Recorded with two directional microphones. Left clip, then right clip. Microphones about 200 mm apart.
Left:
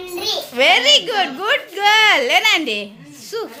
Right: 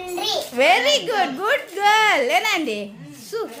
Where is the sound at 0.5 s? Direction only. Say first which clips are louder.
Left 4 dB; 5° right (ahead or behind).